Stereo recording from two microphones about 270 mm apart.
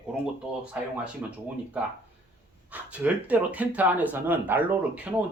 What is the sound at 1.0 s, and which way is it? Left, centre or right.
Speech, centre.